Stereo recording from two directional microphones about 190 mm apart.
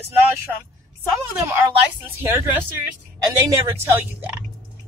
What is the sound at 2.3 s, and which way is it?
Speech, 10° right (ahead or behind).